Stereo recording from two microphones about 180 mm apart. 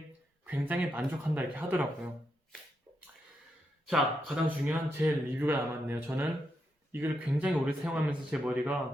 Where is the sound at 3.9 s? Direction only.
Centre (ahead or behind).